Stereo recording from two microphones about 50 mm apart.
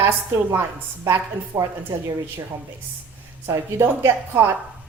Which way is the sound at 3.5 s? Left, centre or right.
Right.